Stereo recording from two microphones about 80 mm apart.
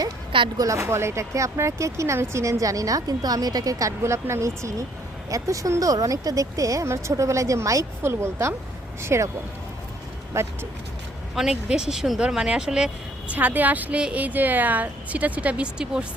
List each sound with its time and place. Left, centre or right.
0.5 s speech: right
10.3 s speech: right
11.3 s speech: centre